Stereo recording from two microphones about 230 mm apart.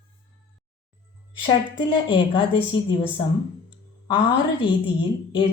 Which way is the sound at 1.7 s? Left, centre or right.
Centre.